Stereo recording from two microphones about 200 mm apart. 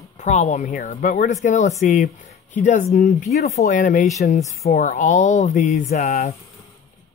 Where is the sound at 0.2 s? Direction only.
35° left (ahead or behind).